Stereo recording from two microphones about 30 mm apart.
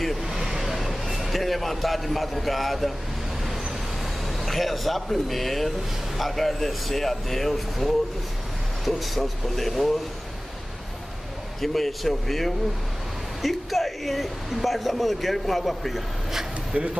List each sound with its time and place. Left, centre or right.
0.3 s vehicle: centre
1.4 s speech: centre
4.3 s speech: centre
11.6 s speech: centre
16.7 s speech: right